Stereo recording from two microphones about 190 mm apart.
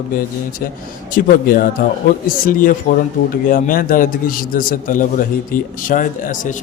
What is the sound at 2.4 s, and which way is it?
A man's voice, 45° left (ahead or behind).